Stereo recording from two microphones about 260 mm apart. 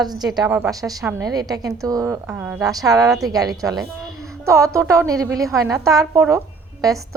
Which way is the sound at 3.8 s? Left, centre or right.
Centre.